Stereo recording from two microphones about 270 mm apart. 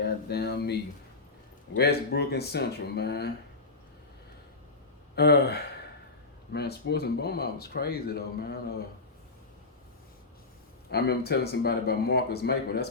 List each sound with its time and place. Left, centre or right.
0.3 s speech: left
5.1 s speech: left
10.9 s speech: left